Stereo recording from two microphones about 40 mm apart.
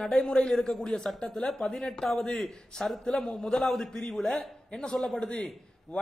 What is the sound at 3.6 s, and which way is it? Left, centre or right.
A man's voice, centre.